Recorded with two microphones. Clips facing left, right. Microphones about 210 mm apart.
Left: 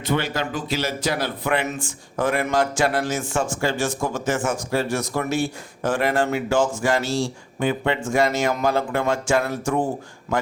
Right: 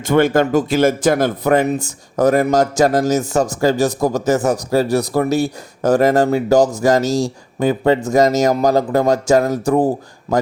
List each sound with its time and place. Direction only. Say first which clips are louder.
0.0 s speech: right 10 dB; 50° right (ahead or behind)